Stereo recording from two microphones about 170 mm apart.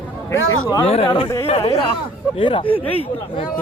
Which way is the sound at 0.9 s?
35° left (ahead or behind).